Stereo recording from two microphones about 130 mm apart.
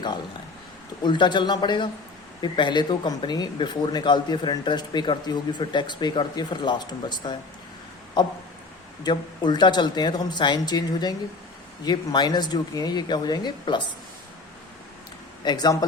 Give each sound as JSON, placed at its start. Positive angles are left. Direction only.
{"t": 1.0, "sound": "speech", "side_deg": 35}
{"t": 9.0, "sound": "speech", "side_deg": 35}
{"t": 15.4, "sound": "speech", "side_deg": 30}